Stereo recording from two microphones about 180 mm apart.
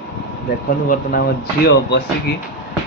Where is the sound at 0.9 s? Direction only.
55° left (ahead or behind).